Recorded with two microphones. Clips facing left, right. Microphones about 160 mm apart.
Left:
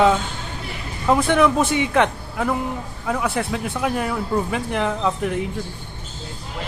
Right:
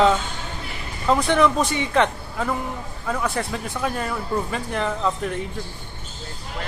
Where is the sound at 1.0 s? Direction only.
10° left (ahead or behind).